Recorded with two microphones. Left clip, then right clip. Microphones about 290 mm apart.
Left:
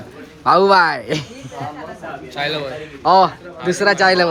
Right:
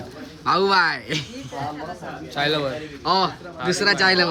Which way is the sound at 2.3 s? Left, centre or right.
Right.